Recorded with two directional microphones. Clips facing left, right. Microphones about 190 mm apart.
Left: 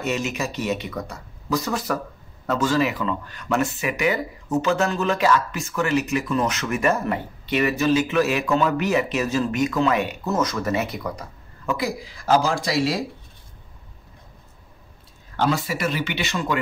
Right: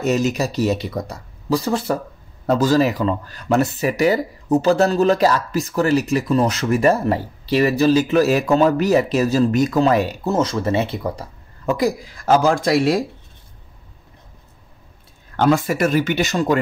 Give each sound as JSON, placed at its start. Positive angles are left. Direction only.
{"t": 0.0, "sound": "speech", "side_deg": -40}
{"t": 15.3, "sound": "speech", "side_deg": -50}